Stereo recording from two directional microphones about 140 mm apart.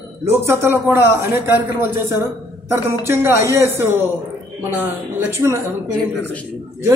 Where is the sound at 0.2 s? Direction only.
20° right (ahead or behind).